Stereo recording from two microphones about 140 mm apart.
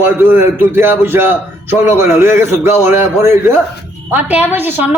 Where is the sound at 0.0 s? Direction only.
15° right (ahead or behind).